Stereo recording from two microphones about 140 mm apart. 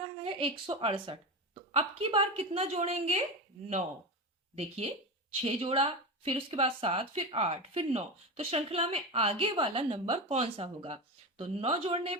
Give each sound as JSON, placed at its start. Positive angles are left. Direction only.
{"t": 0.3, "sound": "a woman's voice", "side_deg": -40}
{"t": 4.5, "sound": "a woman's voice", "side_deg": -45}